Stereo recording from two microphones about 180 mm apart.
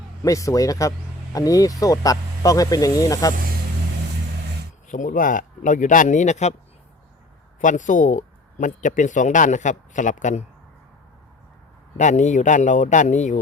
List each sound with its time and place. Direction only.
0.2 s speech: 15° left (ahead or behind)
4.9 s speech: 45° left (ahead or behind)
7.6 s speech: 45° left (ahead or behind)
11.9 s speech: 40° left (ahead or behind)